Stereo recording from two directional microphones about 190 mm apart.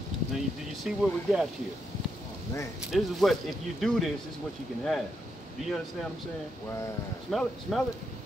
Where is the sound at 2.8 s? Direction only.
Centre (ahead or behind).